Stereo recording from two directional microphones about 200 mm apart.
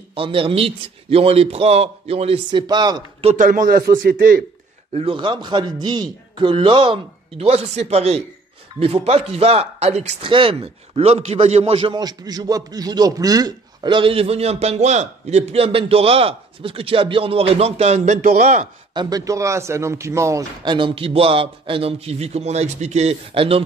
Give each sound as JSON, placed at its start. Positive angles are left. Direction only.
{"t": 0.1, "sound": "speech", "side_deg": -25}
{"t": 4.9, "sound": "speech", "side_deg": -25}
{"t": 18.9, "sound": "speech", "side_deg": -20}